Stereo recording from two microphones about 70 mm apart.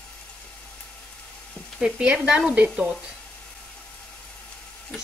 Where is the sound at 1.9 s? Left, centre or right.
Centre.